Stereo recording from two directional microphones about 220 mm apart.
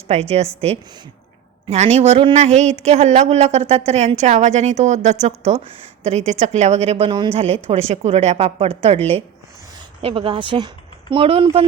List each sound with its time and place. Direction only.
0.1 s a woman's voice: 30° right (ahead or behind)
1.6 s a woman's voice: 30° right (ahead or behind)
10.0 s a woman's voice: 25° right (ahead or behind)